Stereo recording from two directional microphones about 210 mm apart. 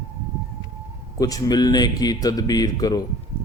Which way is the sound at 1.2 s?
15° left (ahead or behind).